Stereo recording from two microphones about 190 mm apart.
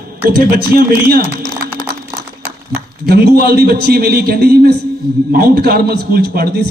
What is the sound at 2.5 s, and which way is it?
A man's voice, 60° right (ahead or behind).